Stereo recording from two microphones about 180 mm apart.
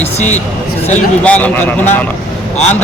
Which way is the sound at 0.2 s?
40° left (ahead or behind).